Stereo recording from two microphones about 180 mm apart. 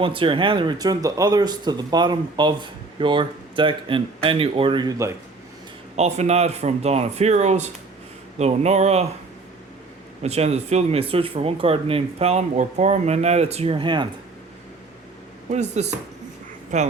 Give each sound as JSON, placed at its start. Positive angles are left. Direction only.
{"t": 0.0, "sound": "speech", "side_deg": -30}
{"t": 6.0, "sound": "speech", "side_deg": -35}
{"t": 10.2, "sound": "speech", "side_deg": -35}
{"t": 15.4, "sound": "speech", "side_deg": -40}